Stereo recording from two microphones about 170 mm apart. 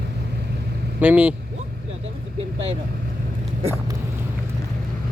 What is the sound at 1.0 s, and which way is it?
Speech, 10° right (ahead or behind).